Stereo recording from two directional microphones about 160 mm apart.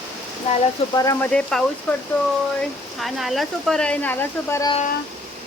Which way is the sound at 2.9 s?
Centre (ahead or behind).